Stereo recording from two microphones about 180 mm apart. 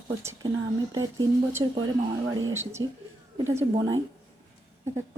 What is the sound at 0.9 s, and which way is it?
Speech, 20° right (ahead or behind).